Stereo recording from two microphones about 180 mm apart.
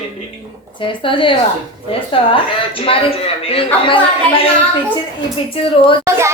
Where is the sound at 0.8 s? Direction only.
30° left (ahead or behind).